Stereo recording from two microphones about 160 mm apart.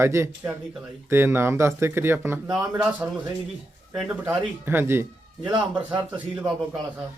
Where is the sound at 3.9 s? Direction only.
5° right (ahead or behind).